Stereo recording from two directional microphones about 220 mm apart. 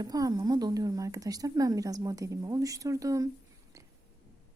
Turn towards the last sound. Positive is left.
turn(degrees=-15)  # may be behind; listen again after turning